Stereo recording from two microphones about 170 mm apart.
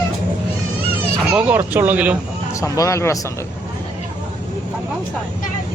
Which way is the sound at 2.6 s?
20° left (ahead or behind).